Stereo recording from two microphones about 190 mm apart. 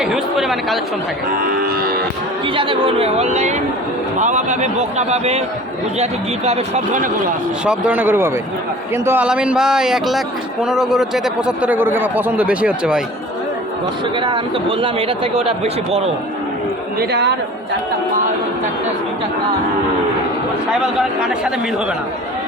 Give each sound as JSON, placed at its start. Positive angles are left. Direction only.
{"t": 0.0, "sound": "speech", "side_deg": 0}
{"t": 1.4, "sound": "moo", "side_deg": -50}
{"t": 2.6, "sound": "a man's voice", "side_deg": -30}
{"t": 7.6, "sound": "a man's voice", "side_deg": -5}
{"t": 14.2, "sound": "speech", "side_deg": -25}
{"t": 17.0, "sound": "speech", "side_deg": -60}
{"t": 20.8, "sound": "a man's voice", "side_deg": -5}